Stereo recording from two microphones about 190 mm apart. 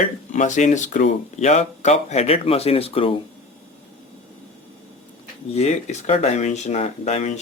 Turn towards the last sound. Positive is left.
turn(degrees=35)  # may be behind; listen again after turning